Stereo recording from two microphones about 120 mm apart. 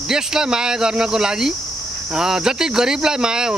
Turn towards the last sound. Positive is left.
turn(degrees=-5)  # may be behind; listen again after turning